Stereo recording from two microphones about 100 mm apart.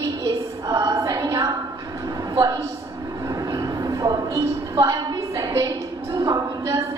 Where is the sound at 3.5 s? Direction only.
35° right (ahead or behind).